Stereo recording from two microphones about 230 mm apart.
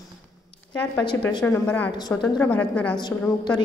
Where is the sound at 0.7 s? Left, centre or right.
Centre.